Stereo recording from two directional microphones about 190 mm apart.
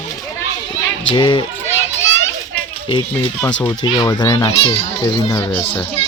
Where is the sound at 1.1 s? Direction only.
25° left (ahead or behind).